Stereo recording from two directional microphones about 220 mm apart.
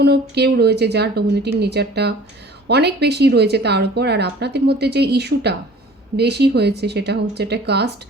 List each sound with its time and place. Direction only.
0.0 s a woman's voice: 45° right (ahead or behind)